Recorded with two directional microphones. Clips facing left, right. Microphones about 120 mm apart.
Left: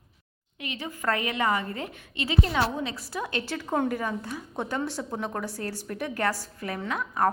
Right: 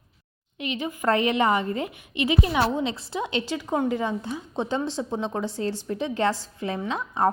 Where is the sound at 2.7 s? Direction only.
25° right (ahead or behind).